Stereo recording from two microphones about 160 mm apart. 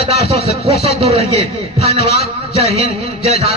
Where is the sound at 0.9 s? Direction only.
40° right (ahead or behind).